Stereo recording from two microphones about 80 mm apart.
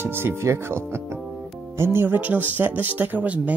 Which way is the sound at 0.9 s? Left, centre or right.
Right.